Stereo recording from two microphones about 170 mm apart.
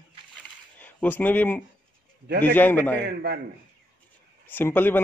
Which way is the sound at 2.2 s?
70° right (ahead or behind).